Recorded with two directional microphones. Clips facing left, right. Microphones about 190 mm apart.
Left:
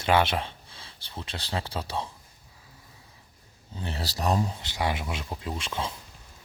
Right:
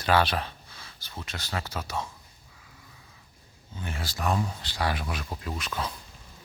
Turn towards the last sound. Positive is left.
turn(degrees=25)  # may be behind; listen again after turning